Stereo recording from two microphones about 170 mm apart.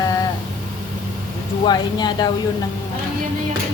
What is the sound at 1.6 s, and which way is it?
Speech, 25° left (ahead or behind).